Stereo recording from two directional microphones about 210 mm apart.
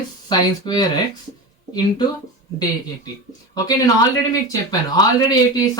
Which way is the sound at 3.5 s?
15° left (ahead or behind).